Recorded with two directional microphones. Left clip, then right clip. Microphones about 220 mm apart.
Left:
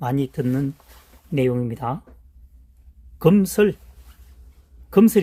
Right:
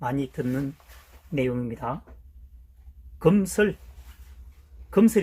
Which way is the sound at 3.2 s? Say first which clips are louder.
Left 4 dB; 50° left (ahead or behind).